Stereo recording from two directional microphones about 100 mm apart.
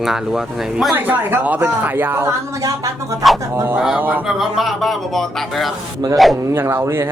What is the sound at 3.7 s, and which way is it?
Speech, 5° right (ahead or behind).